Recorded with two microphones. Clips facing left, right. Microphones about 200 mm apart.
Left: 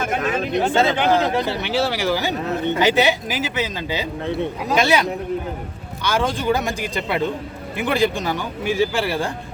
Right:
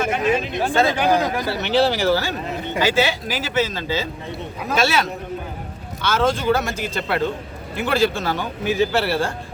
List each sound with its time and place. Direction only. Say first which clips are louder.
0.0 s a sound: right 2 dB; 50° left (ahead or behind)
0.6 s speech: left 2 dB; 20° left (ahead or behind)
1.6 s a man's voice: right 3 dB; 10° left (ahead or behind)